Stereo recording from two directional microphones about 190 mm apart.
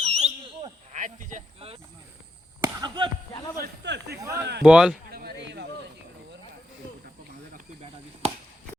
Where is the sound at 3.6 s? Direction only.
60° right (ahead or behind).